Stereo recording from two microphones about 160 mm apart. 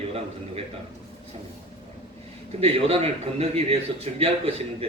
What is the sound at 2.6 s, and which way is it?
A man's voice, 40° right (ahead or behind).